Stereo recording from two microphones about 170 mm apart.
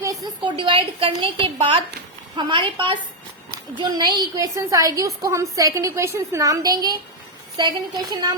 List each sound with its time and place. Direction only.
0.0 s a woman's voice: 25° right (ahead or behind)